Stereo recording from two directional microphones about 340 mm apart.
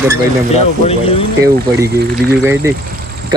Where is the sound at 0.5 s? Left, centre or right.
Centre.